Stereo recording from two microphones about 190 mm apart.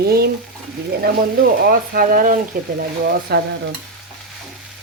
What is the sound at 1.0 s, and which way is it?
Speech, 55° right (ahead or behind).